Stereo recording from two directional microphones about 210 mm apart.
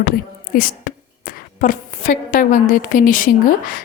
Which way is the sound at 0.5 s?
40° left (ahead or behind).